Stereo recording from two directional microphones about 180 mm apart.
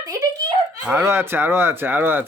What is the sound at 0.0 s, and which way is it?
Speech, 15° right (ahead or behind).